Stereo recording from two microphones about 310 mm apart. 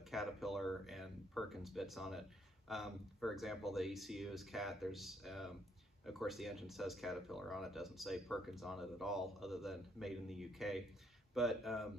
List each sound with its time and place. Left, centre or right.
0.1 s speech: centre